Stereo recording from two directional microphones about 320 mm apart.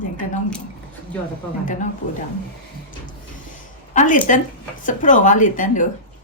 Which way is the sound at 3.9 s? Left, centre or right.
Left.